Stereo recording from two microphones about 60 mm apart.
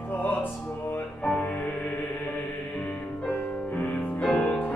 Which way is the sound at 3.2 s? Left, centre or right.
Left.